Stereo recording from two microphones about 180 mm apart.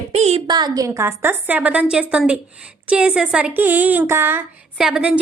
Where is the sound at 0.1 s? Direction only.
35° right (ahead or behind).